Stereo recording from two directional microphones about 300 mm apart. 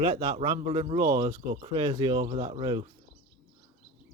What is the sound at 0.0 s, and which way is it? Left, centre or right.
Speech, centre.